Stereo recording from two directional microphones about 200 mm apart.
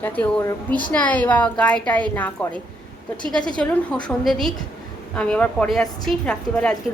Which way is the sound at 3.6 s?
5° left (ahead or behind).